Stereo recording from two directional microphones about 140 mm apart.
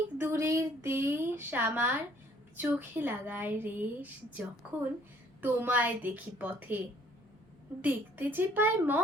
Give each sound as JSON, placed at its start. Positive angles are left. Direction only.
{"t": 0.2, "sound": "a woman's voice", "side_deg": -20}
{"t": 7.8, "sound": "a woman's voice", "side_deg": -15}